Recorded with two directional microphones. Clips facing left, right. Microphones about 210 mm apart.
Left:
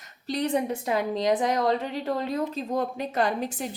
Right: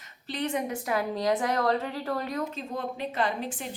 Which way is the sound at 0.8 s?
20° left (ahead or behind).